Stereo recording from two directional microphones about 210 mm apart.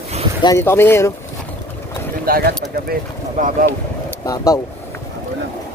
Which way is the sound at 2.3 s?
45° right (ahead or behind).